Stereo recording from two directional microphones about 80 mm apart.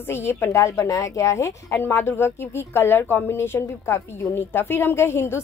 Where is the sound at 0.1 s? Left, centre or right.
Left.